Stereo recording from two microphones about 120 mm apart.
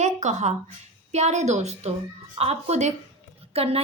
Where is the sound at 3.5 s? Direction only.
55° right (ahead or behind).